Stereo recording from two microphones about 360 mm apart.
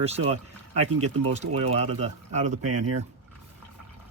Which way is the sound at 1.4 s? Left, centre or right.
Centre.